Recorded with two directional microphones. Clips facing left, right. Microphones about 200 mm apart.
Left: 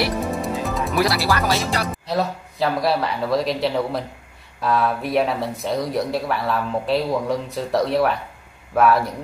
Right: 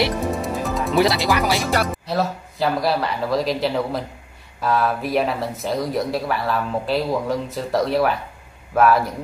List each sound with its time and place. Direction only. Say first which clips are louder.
0.4 s music: even; centre (ahead or behind)
1.1 s speech: right 1 dB; 15° right (ahead or behind)
2.0 s speech: even; centre (ahead or behind)